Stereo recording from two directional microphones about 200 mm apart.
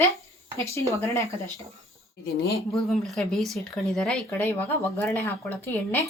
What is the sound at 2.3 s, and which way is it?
Speech, 50° left (ahead or behind).